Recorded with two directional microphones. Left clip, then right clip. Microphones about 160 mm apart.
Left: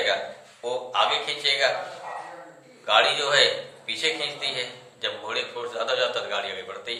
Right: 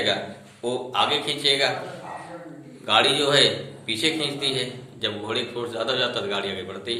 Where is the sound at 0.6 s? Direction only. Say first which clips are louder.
Even; 15° right (ahead or behind).